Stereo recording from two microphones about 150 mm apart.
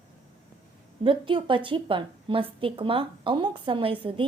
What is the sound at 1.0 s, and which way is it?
Speech, 35° right (ahead or behind).